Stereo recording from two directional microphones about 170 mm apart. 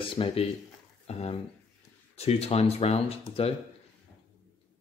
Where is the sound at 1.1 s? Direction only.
35° left (ahead or behind).